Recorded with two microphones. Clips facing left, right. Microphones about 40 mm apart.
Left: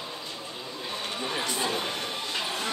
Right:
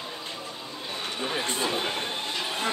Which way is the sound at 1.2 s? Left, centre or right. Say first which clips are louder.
Right 2 dB; centre.